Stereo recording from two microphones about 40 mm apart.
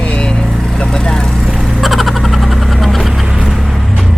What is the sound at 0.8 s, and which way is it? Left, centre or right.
Speech, centre.